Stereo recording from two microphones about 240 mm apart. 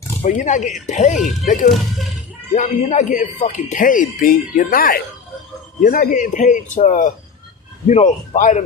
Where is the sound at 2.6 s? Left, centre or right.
Left.